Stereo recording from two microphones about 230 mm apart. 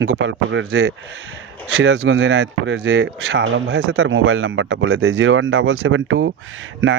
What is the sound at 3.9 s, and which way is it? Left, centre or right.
Speech, right.